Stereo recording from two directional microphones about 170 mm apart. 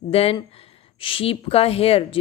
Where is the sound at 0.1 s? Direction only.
35° left (ahead or behind).